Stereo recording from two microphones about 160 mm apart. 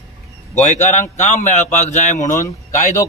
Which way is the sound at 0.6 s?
50° left (ahead or behind).